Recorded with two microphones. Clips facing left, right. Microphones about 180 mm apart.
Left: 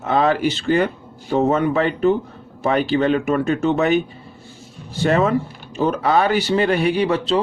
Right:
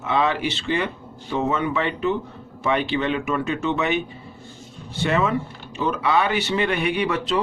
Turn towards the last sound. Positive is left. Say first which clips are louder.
# left 4 dB
turn(degrees=30)  # may be behind; listen again after turning